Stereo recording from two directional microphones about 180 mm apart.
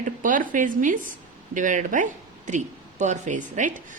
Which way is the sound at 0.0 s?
45° right (ahead or behind).